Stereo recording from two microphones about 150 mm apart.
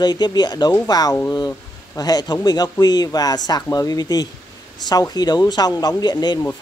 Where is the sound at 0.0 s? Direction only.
25° left (ahead or behind).